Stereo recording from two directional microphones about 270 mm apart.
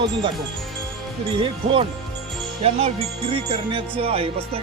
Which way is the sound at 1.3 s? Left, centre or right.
Centre.